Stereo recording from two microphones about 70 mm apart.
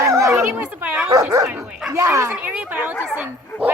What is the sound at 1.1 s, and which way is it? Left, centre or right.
Dog, right.